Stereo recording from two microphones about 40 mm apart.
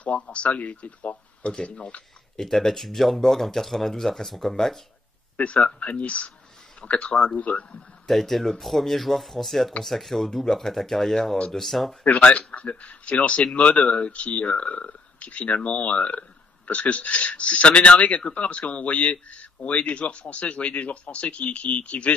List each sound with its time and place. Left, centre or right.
0.0 s speech: left
2.3 s speech: centre
5.4 s speech: left
8.1 s speech: centre
12.0 s speech: left